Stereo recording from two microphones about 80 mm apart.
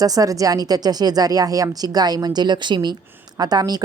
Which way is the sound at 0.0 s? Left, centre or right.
Right.